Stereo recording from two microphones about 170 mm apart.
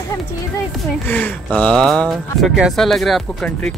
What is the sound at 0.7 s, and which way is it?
Speech, 10° left (ahead or behind).